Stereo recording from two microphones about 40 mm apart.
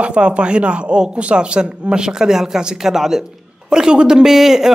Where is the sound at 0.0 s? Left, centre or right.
Right.